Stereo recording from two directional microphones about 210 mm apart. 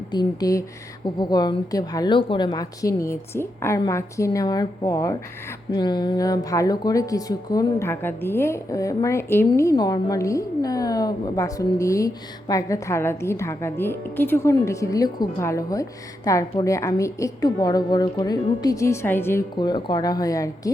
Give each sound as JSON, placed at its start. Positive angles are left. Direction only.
{"t": 0.1, "sound": "a woman's voice", "side_deg": 20}